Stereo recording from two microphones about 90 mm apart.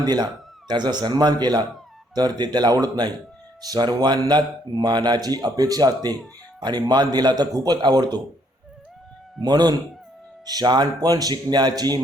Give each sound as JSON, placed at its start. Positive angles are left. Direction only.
{"t": 0.0, "sound": "speech", "side_deg": -45}
{"t": 9.4, "sound": "speech", "side_deg": -50}